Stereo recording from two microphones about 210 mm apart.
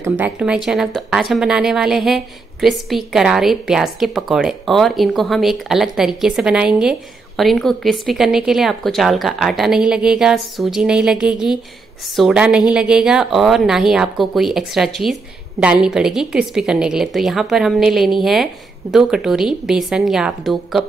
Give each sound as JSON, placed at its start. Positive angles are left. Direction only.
{"t": 0.2, "sound": "a woman's voice", "side_deg": -5}